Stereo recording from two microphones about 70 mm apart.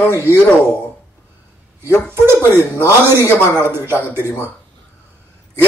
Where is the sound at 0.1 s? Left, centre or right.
Right.